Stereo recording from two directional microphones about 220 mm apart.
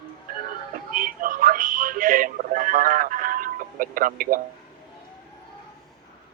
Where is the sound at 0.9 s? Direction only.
40° right (ahead or behind).